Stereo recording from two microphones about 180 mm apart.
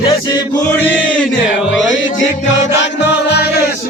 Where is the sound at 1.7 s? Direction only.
90° left.